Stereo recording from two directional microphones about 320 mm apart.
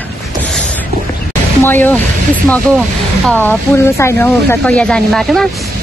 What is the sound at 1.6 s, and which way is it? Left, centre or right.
Speech, centre.